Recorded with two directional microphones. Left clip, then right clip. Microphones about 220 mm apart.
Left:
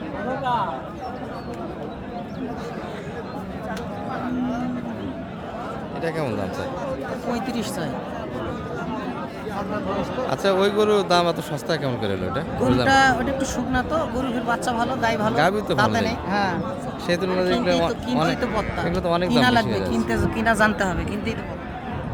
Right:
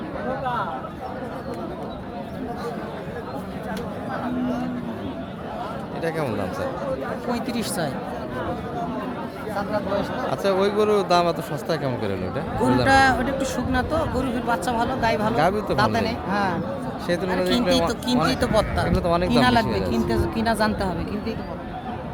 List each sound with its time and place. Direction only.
6.0 s a man's voice: centre (ahead or behind)
7.3 s speech: 5° right (ahead or behind)
10.2 s a man's voice: 10° left (ahead or behind)
17.1 s speech: 10° left (ahead or behind)
18.3 s speech: 40° right (ahead or behind)
18.9 s a man's voice: centre (ahead or behind)